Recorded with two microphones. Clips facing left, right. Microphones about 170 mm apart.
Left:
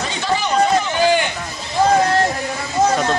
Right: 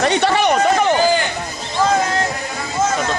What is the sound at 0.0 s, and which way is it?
Run, 65° right (ahead or behind).